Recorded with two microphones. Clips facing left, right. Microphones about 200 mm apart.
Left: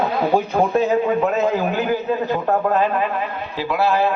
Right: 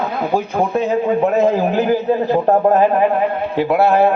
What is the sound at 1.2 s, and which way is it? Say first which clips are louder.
A man's voice: right 4 dB; 35° right (ahead or behind).